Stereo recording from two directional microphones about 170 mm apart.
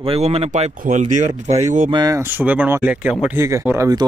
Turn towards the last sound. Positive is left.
turn(degrees=-15)  # may be behind; listen again after turning